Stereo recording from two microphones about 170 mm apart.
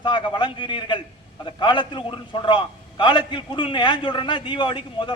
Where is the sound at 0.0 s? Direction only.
30° left (ahead or behind).